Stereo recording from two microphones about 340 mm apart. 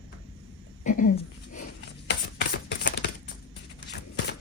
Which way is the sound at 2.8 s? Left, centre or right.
Left.